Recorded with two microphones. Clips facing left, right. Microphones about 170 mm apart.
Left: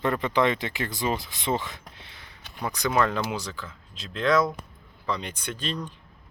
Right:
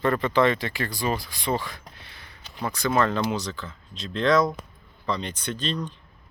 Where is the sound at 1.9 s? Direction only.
20° left (ahead or behind).